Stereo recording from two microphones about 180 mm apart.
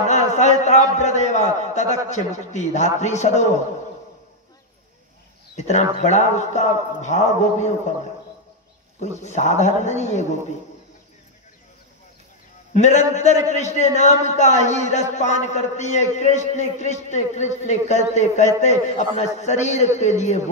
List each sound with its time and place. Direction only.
0.0 s a sound: 40° left (ahead or behind)
0.9 s a man's voice: 40° left (ahead or behind)
5.6 s a man's voice: 40° left (ahead or behind)
9.0 s a man's voice: 40° left (ahead or behind)
12.7 s a man's voice: 40° left (ahead or behind)